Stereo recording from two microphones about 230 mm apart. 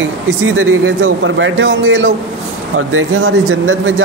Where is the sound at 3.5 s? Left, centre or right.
Right.